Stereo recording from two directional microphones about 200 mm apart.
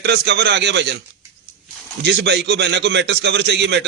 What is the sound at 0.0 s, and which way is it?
Speech, 55° right (ahead or behind).